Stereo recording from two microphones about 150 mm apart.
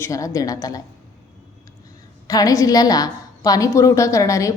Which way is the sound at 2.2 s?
25° left (ahead or behind).